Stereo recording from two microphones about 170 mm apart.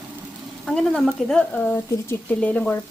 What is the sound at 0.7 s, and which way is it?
Speech, 5° left (ahead or behind).